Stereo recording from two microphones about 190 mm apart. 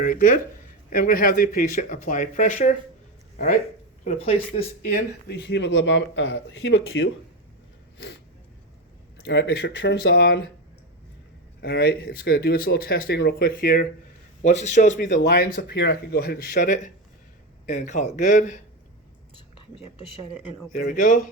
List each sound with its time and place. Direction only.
0.0 s speech: 45° left (ahead or behind)
4.0 s a man's voice: 30° left (ahead or behind)
5.3 s speech: 65° left (ahead or behind); by 7.1 s 90° left
9.2 s speech: 60° left (ahead or behind)
11.6 s a man's voice: 55° left (ahead or behind)
15.1 s a man's voice: 55° left (ahead or behind)
20.7 s speech: 45° left (ahead or behind)